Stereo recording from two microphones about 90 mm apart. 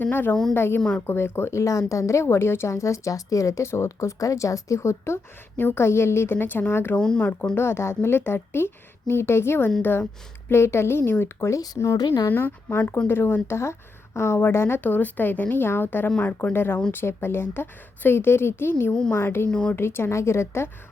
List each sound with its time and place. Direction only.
0.0 s a woman's voice: 20° left (ahead or behind)
0.8 s speech: 10° left (ahead or behind)
1.0 s a woman's voice: 25° left (ahead or behind)
6.9 s speech: 10° left (ahead or behind)
7.5 s a woman's voice: 25° left (ahead or behind); by 12.3 s 45° left (ahead or behind)
12.3 s speech: 20° left (ahead or behind)
19.5 s speech: 10° left (ahead or behind)
19.7 s speech: 25° left (ahead or behind)